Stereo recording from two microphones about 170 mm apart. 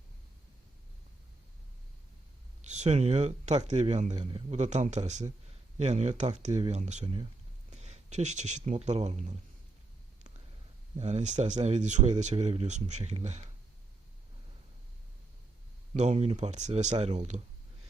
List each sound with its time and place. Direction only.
2.6 s speech: 40° right (ahead or behind)
7.0 s speech: 30° right (ahead or behind)
7.7 s speech: 40° right (ahead or behind)
10.9 s speech: 40° right (ahead or behind)
16.0 s speech: 40° right (ahead or behind)